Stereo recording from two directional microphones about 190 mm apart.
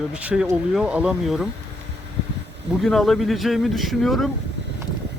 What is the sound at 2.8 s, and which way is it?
Speech, centre (ahead or behind).